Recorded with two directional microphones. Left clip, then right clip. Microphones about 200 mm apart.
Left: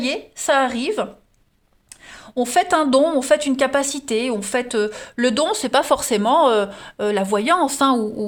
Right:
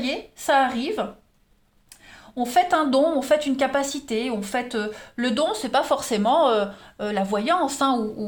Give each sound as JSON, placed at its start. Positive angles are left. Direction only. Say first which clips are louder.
{"t": 0.0, "sound": "a woman's voice", "louder": "left 4 dB", "side_deg": 50}
{"t": 2.0, "sound": "a woman's voice", "louder": "left 5 dB", "side_deg": 45}